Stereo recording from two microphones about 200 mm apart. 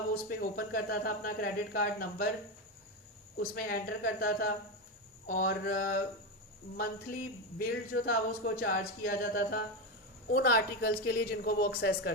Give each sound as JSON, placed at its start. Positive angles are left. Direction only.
{"t": 0.1, "sound": "speech", "side_deg": 45}
{"t": 3.3, "sound": "speech", "side_deg": 45}